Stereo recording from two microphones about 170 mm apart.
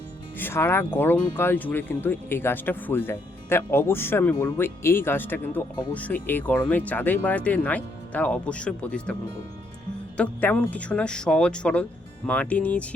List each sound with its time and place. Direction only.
0.3 s speech: 15° left (ahead or behind)
10.2 s speech: 5° left (ahead or behind)